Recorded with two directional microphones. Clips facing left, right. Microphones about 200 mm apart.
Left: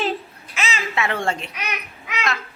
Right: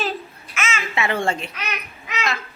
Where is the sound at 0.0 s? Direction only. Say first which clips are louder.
Left 2 dB; 30° left (ahead or behind).